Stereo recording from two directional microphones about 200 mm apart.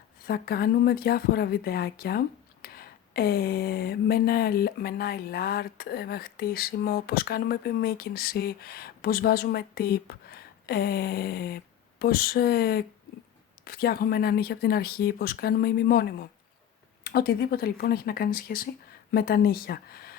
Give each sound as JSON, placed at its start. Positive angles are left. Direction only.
{"t": 0.3, "sound": "speech", "side_deg": 50}